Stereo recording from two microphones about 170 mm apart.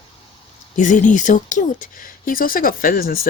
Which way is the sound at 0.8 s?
45° left (ahead or behind).